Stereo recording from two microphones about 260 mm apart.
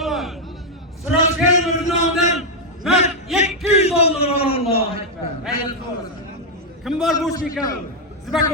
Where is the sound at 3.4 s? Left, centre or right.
Left.